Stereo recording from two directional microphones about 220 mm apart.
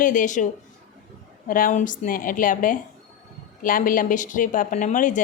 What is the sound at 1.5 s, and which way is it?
A woman's voice, 40° left (ahead or behind).